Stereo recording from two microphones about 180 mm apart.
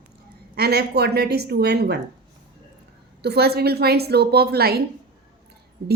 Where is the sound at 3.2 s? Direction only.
65° right (ahead or behind).